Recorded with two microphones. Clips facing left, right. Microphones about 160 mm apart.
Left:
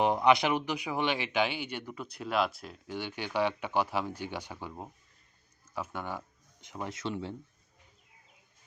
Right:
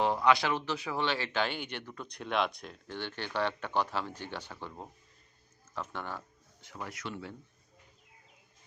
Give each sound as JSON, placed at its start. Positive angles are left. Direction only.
{"t": 0.0, "sound": "a man's voice", "side_deg": 20}